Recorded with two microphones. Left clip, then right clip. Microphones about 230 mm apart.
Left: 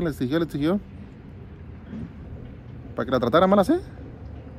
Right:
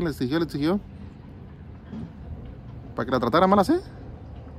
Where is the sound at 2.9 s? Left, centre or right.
Centre.